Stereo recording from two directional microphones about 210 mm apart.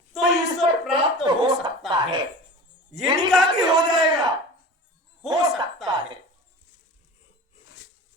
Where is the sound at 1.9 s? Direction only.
20° right (ahead or behind).